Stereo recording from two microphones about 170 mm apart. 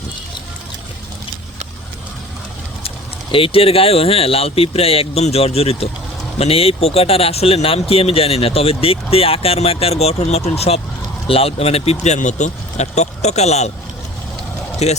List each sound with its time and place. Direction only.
3.3 s speech: 35° left (ahead or behind)
14.8 s speech: 40° left (ahead or behind)